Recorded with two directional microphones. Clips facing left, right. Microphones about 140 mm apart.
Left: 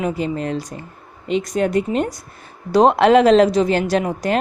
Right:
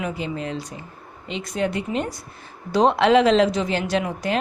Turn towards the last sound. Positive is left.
turn(degrees=40)  # may be behind; listen again after turning